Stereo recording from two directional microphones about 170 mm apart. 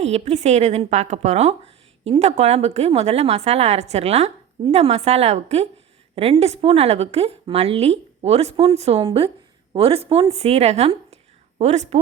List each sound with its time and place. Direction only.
0.0 s a woman's voice: 40° right (ahead or behind)